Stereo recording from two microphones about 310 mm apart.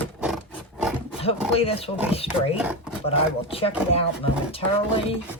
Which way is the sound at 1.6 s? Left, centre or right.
Centre.